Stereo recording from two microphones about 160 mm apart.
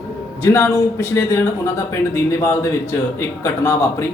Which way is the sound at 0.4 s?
15° left (ahead or behind).